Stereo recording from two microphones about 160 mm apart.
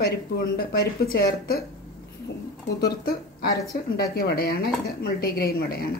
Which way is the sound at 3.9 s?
70° left (ahead or behind).